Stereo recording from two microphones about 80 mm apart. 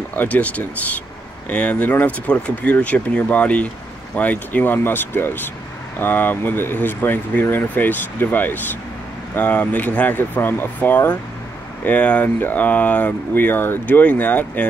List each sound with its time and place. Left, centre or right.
0.1 s speech: left